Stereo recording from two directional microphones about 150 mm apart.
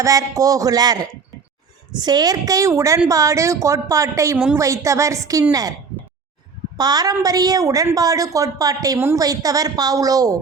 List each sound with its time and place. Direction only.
0.0 s a woman's voice: 20° right (ahead or behind)
2.0 s a woman's voice: 25° right (ahead or behind)
6.7 s a woman's voice: 25° right (ahead or behind)